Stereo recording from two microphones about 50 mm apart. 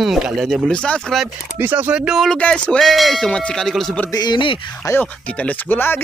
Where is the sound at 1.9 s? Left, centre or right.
Centre.